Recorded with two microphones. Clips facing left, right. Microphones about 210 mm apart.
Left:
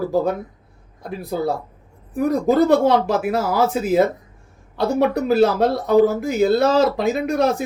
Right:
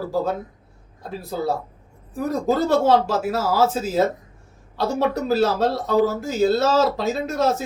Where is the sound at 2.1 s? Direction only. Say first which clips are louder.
Left 5 dB; 15° left (ahead or behind).